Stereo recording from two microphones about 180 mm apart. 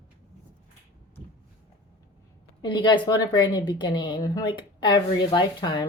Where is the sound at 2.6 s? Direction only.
25° left (ahead or behind).